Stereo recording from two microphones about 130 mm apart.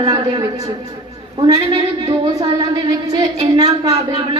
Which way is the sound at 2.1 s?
30° right (ahead or behind).